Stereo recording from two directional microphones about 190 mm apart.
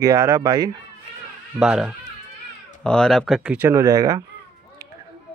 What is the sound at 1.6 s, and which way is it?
Speech, 5° right (ahead or behind).